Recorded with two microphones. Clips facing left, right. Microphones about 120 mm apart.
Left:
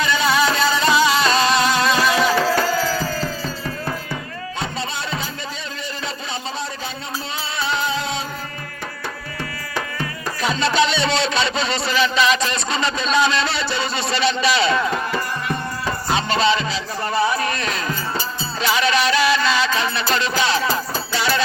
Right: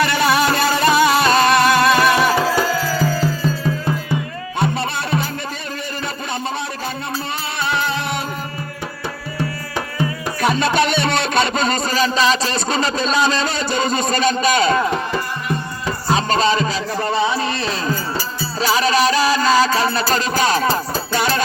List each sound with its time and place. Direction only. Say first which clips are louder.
0.0 s music: right 2 dB; 60° right (ahead or behind)
2.6 s music: right 2 dB; 10° right (ahead or behind)
4.6 s music: right 7 dB; 60° right (ahead or behind)
7.6 s music: right 1 dB; 55° right (ahead or behind)
10.4 s speech: right 2 dB; 55° right (ahead or behind)
16.0 s music: right 2 dB; 40° right (ahead or behind)
17.1 s music: even; 20° right (ahead or behind); by 21.4 s 50° right (ahead or behind)